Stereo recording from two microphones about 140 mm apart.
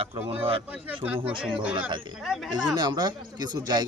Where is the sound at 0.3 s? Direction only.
40° right (ahead or behind).